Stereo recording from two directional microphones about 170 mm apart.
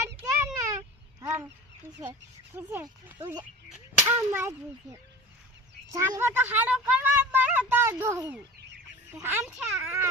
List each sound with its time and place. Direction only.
0.2 s a sound: 15° right (ahead or behind)
2.5 s cap gun: 10° right (ahead or behind)
3.2 s speech: 20° right (ahead or behind)
3.7 s cap gun: 10° right (ahead or behind)
5.9 s speech: 15° right (ahead or behind)
9.1 s cap gun: 15° right (ahead or behind)